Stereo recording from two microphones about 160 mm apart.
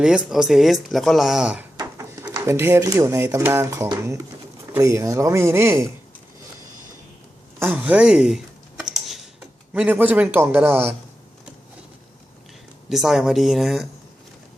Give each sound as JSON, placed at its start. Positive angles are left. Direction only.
{"t": 0.0, "sound": "speech", "side_deg": -5}
{"t": 1.8, "sound": "a man's voice", "side_deg": -20}
{"t": 7.6, "sound": "a man's voice", "side_deg": -10}
{"t": 8.8, "sound": "tick-tock", "side_deg": 0}
{"t": 9.7, "sound": "a man's voice", "side_deg": -10}
{"t": 12.9, "sound": "speech", "side_deg": 0}